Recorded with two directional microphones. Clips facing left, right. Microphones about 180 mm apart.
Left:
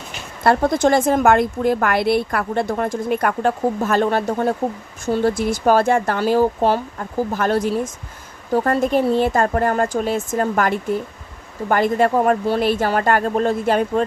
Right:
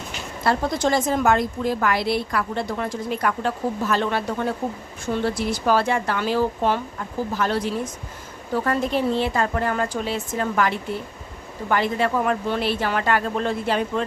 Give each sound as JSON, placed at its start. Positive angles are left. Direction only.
{"t": 0.4, "sound": "a woman's voice", "side_deg": 55}